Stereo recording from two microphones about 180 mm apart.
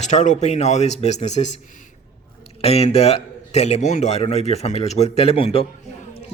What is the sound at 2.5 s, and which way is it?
Speech, 35° left (ahead or behind).